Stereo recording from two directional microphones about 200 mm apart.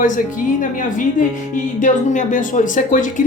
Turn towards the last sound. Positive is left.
turn(degrees=40)  # may be behind; listen again after turning